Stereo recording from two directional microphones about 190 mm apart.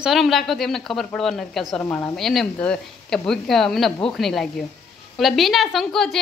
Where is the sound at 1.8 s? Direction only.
10° left (ahead or behind).